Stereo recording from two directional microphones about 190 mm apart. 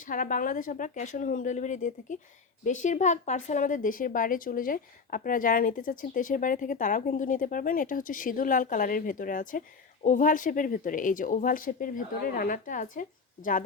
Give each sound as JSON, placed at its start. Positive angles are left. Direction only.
{"t": 0.0, "sound": "speech", "side_deg": 45}